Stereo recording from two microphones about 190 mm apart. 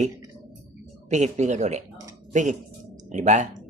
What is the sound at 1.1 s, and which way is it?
Speech, 40° right (ahead or behind).